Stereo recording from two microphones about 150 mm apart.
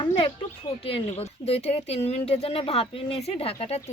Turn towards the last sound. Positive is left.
turn(degrees=40)  # may be behind; listen again after turning